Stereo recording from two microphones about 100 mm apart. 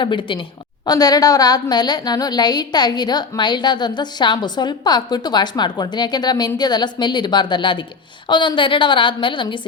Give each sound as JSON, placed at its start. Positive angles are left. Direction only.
{"t": 0.0, "sound": "a woman's voice", "side_deg": 55}
{"t": 0.9, "sound": "a woman's voice", "side_deg": 40}